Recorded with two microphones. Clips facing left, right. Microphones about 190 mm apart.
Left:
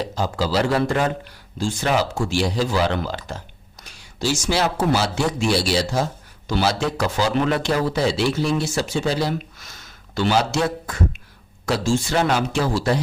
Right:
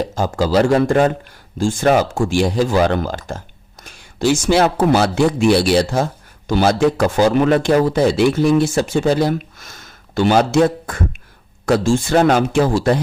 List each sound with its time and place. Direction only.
0.0 s speech: 45° right (ahead or behind)